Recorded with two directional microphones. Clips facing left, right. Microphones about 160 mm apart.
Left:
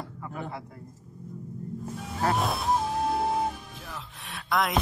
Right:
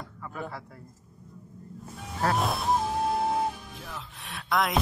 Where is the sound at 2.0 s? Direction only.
Centre (ahead or behind).